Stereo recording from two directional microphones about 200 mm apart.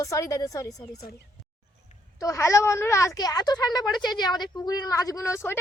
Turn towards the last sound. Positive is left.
turn(degrees=15)  # may be behind; listen again after turning